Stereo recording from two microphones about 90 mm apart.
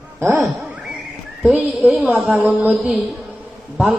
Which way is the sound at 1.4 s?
Centre (ahead or behind).